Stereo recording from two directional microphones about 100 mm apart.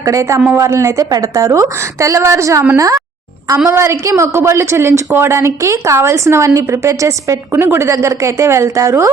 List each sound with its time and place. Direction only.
0.0 s a woman's voice: 30° right (ahead or behind)